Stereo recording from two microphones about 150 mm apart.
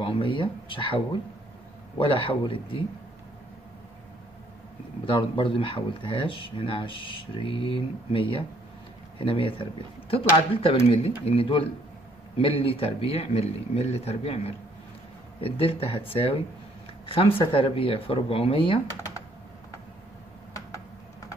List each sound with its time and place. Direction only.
0.0 s speech: 35° left (ahead or behind)
5.0 s speech: 35° left (ahead or behind)
18.9 s computer keyboard: 25° left (ahead or behind)